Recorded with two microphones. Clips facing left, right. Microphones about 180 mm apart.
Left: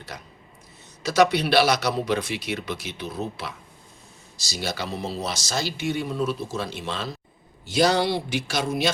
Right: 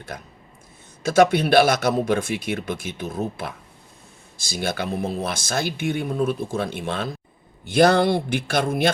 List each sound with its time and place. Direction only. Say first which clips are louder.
0.1 s speech: right 3 dB; 50° right (ahead or behind)